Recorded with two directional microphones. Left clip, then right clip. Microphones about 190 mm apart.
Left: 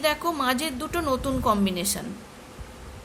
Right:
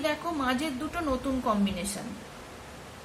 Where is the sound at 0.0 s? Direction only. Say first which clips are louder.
Left 5 dB; 55° left (ahead or behind).